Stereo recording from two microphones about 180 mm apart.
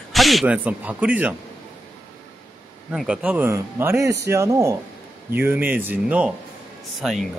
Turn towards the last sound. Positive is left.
turn(degrees=0)  # may be behind; listen again after turning